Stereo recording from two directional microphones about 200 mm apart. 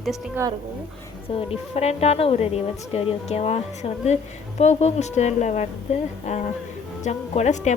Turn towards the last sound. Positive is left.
turn(degrees=35)  # may be behind; listen again after turning